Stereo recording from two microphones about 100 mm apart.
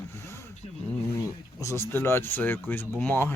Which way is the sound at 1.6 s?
25° left (ahead or behind).